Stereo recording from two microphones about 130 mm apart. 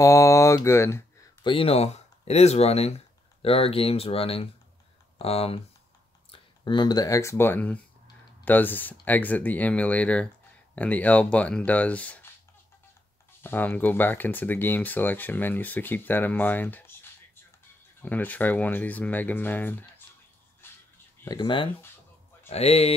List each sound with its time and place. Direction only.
0.0 s speech: 25° left (ahead or behind)
1.4 s speech: 45° left (ahead or behind)
6.3 s speech: 35° left (ahead or behind); by 12.3 s 10° left (ahead or behind)
13.4 s speech: 15° left (ahead or behind)
18.0 s speech: 15° left (ahead or behind)
21.3 s speech: 40° left (ahead or behind)
22.5 s speech: 50° left (ahead or behind)